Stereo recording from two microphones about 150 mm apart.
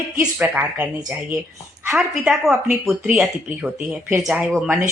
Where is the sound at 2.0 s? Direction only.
Centre (ahead or behind).